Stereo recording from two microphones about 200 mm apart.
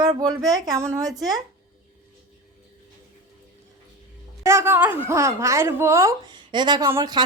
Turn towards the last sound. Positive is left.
turn(degrees=-20)  # may be behind; listen again after turning